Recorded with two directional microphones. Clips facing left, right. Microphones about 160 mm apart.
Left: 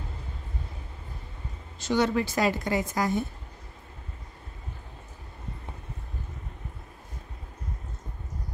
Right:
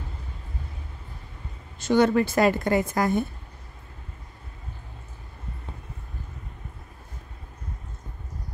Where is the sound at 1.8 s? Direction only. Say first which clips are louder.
Right 5 dB; 50° right (ahead or behind).